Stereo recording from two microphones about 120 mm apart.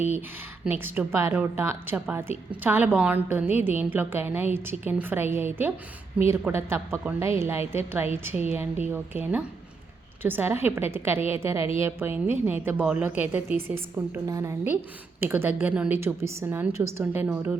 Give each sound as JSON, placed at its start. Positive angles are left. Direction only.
{"t": 0.6, "sound": "a woman's voice", "side_deg": -15}
{"t": 14.3, "sound": "a woman's voice", "side_deg": -30}
{"t": 15.2, "sound": "a woman's voice", "side_deg": -20}